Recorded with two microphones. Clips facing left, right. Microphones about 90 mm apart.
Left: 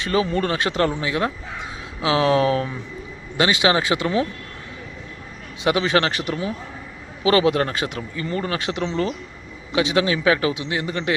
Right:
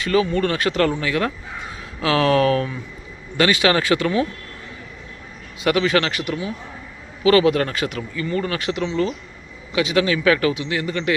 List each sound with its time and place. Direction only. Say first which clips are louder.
0.0 s speech: right 2 dB; 30° left (ahead or behind)
5.6 s speech: right 1 dB; 25° left (ahead or behind)